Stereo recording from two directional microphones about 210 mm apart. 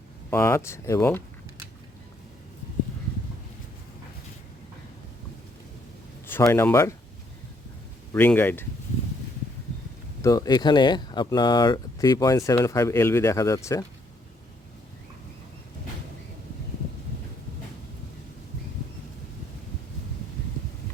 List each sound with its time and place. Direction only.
0.3 s speech: 10° left (ahead or behind)
6.2 s speech: 10° left (ahead or behind)
8.1 s speech: 10° left (ahead or behind)
10.2 s speech: 15° left (ahead or behind)